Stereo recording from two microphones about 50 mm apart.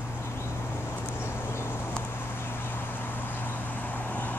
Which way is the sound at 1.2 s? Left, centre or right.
Left.